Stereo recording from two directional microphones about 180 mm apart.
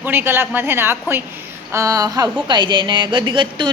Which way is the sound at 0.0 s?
10° right (ahead or behind).